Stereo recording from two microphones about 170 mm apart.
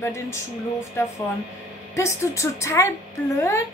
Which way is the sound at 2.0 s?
15° left (ahead or behind).